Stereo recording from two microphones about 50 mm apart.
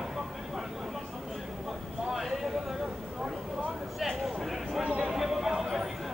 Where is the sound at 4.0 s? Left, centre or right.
Centre.